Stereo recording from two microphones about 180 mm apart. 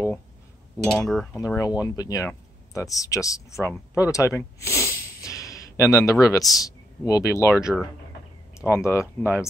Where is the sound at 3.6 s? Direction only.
15° left (ahead or behind).